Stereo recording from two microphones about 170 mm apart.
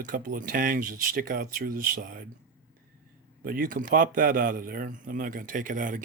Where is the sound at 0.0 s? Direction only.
50° right (ahead or behind).